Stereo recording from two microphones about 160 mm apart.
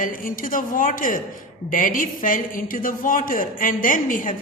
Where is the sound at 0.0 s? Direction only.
60° left (ahead or behind).